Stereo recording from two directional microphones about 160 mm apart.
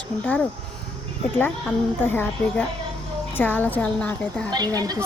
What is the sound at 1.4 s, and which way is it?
Speech, 10° left (ahead or behind).